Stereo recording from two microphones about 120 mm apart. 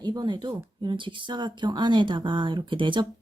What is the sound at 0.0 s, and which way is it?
Speech, 35° right (ahead or behind).